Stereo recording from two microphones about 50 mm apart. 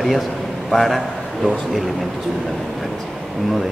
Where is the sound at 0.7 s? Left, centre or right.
Centre.